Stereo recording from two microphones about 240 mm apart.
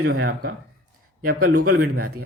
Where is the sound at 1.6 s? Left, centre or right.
Right.